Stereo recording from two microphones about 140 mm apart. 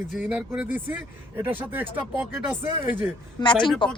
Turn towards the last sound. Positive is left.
turn(degrees=35)  # may be behind; listen again after turning